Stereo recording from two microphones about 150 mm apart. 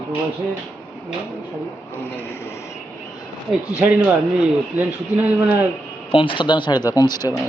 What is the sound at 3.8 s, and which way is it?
A man's voice, 10° right (ahead or behind).